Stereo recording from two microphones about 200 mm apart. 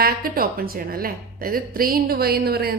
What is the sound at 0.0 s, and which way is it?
A woman's voice, 45° right (ahead or behind).